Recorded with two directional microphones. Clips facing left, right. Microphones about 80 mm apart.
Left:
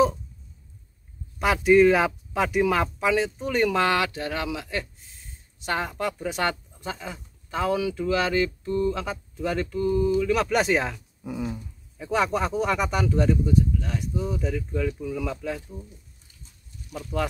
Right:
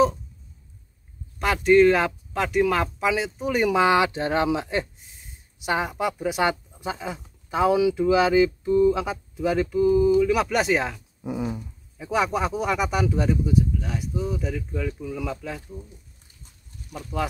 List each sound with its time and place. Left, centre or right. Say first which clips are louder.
1.4 s speech: right 1 dB; centre; by 5.0 s right
5.6 s speech: right 3 dB; centre
11.2 s dog: right 3 dB; centre
12.0 s speech: right 1 dB; centre
16.9 s speech: even; centre